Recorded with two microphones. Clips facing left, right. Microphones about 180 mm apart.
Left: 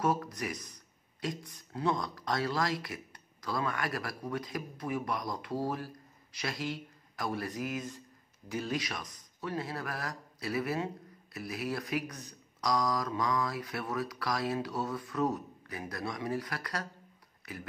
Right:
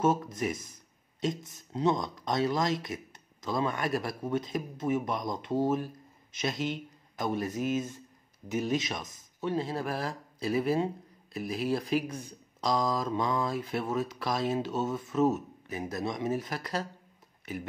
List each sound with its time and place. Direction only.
0.0 s speech: 25° right (ahead or behind)